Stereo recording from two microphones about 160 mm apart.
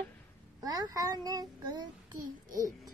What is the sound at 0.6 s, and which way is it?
A child's voice, 20° right (ahead or behind).